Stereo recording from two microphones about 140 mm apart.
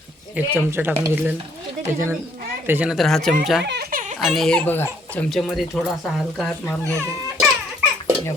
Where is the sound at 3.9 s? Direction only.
70° right (ahead or behind).